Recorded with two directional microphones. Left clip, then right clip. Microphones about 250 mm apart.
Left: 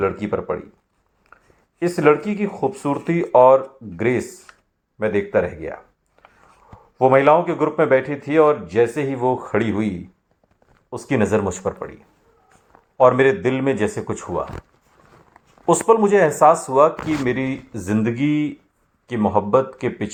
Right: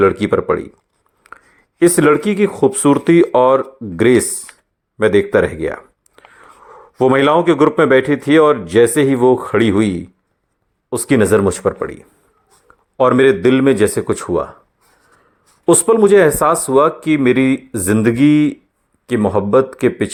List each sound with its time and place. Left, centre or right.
0.0 s a man's voice: right
1.2 s a sound: right
1.8 s a man's voice: right
13.0 s a man's voice: right
15.6 s a man's voice: right